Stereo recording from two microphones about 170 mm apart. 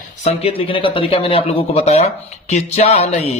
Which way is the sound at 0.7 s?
30° left (ahead or behind).